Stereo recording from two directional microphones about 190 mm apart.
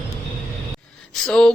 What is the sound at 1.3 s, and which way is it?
Speech, 5° left (ahead or behind).